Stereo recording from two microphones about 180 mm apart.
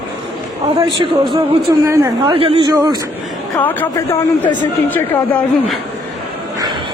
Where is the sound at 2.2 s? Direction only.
30° right (ahead or behind).